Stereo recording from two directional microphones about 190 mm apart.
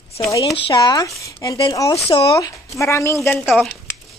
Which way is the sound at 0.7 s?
20° left (ahead or behind).